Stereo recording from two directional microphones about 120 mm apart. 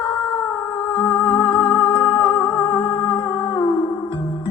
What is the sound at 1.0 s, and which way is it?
Music, 45° left (ahead or behind).